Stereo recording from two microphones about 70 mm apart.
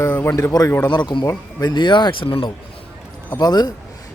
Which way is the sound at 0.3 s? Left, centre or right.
Left.